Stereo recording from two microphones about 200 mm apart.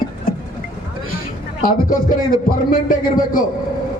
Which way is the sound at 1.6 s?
45° left (ahead or behind).